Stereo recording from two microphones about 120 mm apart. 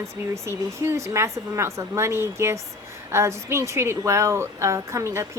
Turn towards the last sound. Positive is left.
turn(degrees=-25)  # may be behind; listen again after turning